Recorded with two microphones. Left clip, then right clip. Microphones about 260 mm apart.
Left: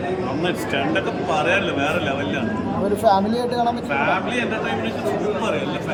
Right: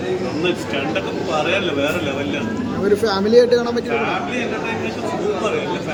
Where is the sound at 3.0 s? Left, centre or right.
Centre.